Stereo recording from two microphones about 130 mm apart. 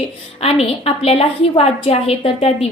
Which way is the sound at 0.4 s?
50° left (ahead or behind).